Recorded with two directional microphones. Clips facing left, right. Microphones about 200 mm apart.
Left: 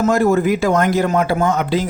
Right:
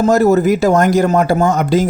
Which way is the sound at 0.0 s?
40° right (ahead or behind).